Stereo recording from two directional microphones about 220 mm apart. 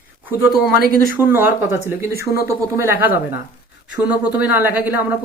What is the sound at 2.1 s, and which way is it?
Speech, 45° left (ahead or behind).